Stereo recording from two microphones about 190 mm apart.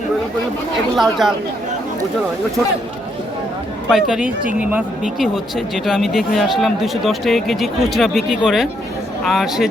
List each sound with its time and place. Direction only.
0.9 s speech: centre (ahead or behind)
3.8 s speech: 5° right (ahead or behind)